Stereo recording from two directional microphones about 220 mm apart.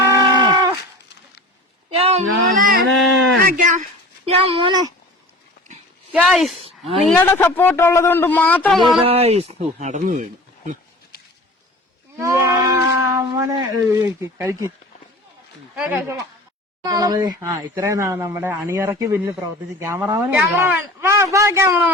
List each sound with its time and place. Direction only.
0.1 s livestock: 20° right (ahead or behind)
2.0 s a sound: 30° right (ahead or behind)
3.4 s speech: 35° right (ahead or behind)
4.3 s speech: 25° right (ahead or behind)
6.1 s speech: centre (ahead or behind)
7.1 s speech: 10° left (ahead or behind)
9.0 s speech: 25° right (ahead or behind)
12.1 s livestock: 15° right (ahead or behind)
14.0 s speech: 10° right (ahead or behind)
15.7 s speech: 5° right (ahead or behind)
16.8 s speech: 15° right (ahead or behind)